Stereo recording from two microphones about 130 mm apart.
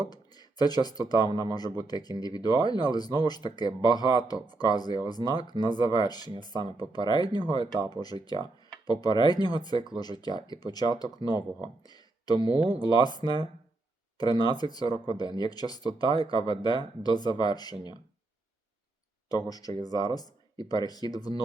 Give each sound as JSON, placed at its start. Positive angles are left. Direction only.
{"t": 0.0, "sound": "speech", "side_deg": 30}
{"t": 19.3, "sound": "speech", "side_deg": 30}